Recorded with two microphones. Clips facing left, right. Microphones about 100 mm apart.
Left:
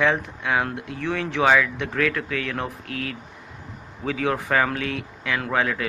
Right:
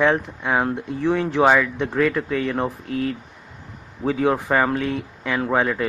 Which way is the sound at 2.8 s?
90° left.